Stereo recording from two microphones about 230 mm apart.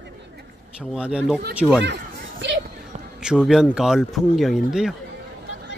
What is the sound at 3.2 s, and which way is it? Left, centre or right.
Speech, centre.